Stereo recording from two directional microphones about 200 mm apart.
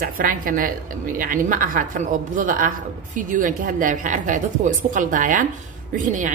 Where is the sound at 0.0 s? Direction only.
45° right (ahead or behind).